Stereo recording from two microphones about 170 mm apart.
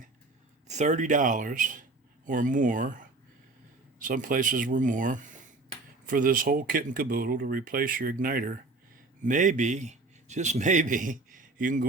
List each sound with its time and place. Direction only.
0.7 s speech: 45° right (ahead or behind); by 8.5 s 60° right (ahead or behind)
9.2 s a man's voice: 50° right (ahead or behind)